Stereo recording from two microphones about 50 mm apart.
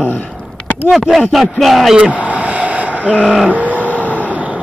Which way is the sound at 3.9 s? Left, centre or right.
Left.